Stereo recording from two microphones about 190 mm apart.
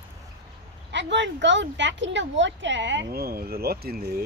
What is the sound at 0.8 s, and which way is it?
Speech, 70° right (ahead or behind).